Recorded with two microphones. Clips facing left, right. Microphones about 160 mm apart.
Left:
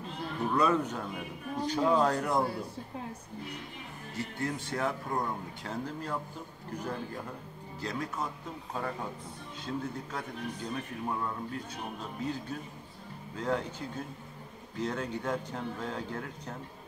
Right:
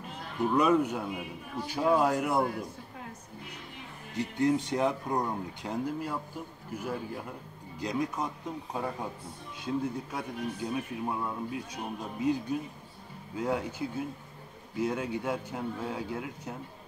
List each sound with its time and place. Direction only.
0.6 s a man's voice: 10° right (ahead or behind)
4.2 s a man's voice: 15° right (ahead or behind)
9.7 s a man's voice: 10° right (ahead or behind)